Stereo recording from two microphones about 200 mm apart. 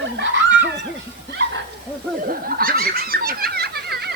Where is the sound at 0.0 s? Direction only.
65° right (ahead or behind).